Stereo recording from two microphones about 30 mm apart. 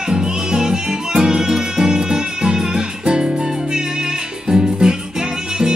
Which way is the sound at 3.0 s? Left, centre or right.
Right.